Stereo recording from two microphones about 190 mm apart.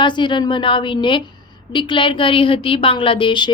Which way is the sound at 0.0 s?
25° left (ahead or behind).